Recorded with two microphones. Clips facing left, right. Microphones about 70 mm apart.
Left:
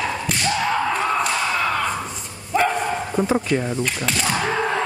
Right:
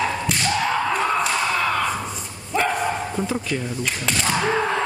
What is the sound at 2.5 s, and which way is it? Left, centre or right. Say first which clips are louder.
Bow-wow: left 3 dB; centre.